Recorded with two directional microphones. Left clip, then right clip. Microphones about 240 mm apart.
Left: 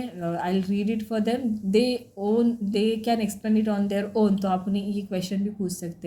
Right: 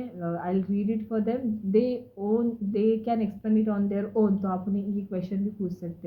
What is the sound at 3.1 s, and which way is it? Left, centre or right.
Speech, left.